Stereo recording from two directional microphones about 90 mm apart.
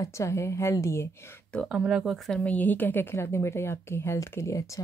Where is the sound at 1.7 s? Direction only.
10° right (ahead or behind).